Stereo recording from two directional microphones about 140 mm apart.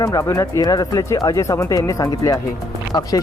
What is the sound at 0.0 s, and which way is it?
Speech, 25° left (ahead or behind).